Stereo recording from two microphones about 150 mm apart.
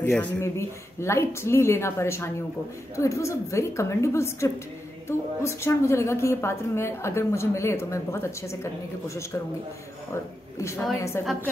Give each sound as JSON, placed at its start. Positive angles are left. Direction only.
{"t": 0.0, "sound": "a woman's voice", "side_deg": 15}
{"t": 10.6, "sound": "a woman's voice", "side_deg": 20}